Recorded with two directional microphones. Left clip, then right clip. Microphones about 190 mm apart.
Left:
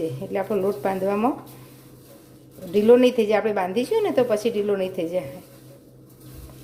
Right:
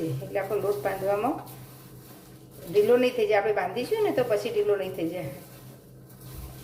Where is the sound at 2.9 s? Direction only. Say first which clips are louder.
Left 9 dB; 50° left (ahead or behind).